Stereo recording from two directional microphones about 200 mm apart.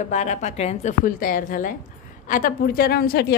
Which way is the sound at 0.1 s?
35° left (ahead or behind).